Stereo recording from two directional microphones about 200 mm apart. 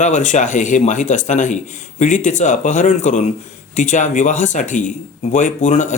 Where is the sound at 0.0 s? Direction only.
40° left (ahead or behind).